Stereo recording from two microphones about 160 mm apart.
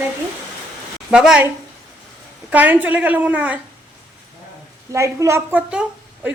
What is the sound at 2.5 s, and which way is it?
Speech, 10° right (ahead or behind).